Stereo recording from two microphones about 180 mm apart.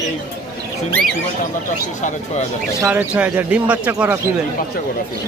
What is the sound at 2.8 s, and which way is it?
Speech, 5° right (ahead or behind).